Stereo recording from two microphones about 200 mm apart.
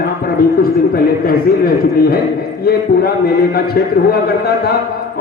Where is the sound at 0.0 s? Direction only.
50° left (ahead or behind).